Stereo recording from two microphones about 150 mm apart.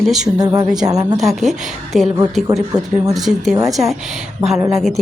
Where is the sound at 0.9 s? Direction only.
25° right (ahead or behind).